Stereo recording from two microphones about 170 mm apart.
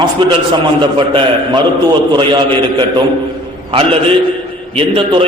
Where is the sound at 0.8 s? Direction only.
30° right (ahead or behind).